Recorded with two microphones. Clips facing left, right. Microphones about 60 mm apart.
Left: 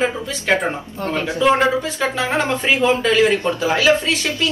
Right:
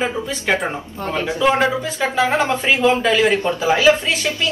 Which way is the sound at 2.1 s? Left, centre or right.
Right.